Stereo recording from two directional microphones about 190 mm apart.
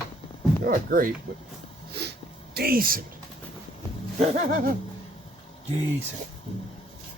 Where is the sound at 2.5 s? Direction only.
50° right (ahead or behind).